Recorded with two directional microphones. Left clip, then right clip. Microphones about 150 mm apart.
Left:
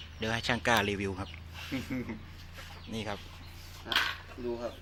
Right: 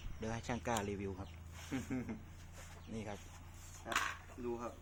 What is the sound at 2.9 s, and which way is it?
Speech, 15° left (ahead or behind).